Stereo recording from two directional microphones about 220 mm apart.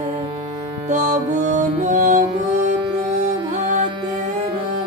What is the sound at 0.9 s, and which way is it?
Music, 35° right (ahead or behind).